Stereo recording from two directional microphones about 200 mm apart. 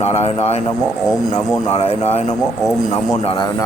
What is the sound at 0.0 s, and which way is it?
Speech, 30° left (ahead or behind).